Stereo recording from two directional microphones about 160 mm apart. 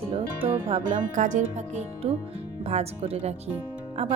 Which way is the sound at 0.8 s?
50° right (ahead or behind).